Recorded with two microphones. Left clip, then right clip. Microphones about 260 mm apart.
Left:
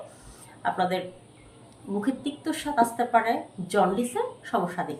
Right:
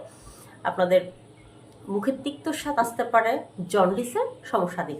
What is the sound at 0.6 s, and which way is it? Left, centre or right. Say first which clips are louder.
Speech: right 5 dB; centre.